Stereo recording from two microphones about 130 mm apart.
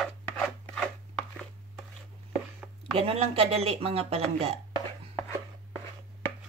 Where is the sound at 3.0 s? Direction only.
50° right (ahead or behind).